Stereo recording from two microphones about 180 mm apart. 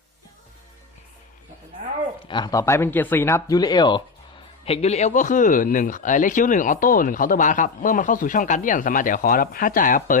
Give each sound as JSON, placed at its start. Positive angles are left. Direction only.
{"t": 2.2, "sound": "speech", "side_deg": 25}
{"t": 4.6, "sound": "speech", "side_deg": 35}